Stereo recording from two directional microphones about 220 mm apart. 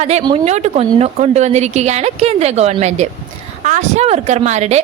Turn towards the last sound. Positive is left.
turn(degrees=-30)  # may be behind; listen again after turning